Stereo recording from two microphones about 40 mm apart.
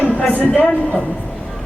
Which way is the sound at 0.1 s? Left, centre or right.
Left.